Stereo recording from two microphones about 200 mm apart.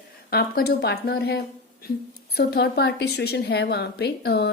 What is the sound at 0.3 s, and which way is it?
A woman's voice, 50° left (ahead or behind).